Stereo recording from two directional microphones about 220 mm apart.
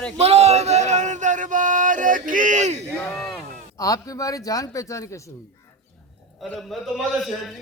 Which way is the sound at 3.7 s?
15° left (ahead or behind).